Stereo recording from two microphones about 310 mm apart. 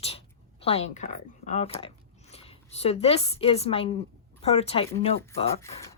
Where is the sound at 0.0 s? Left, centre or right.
Centre.